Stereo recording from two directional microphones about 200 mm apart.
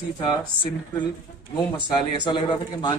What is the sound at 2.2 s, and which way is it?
Speech, 20° left (ahead or behind).